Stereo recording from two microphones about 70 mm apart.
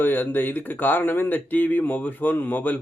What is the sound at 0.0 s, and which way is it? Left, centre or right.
Speech, left.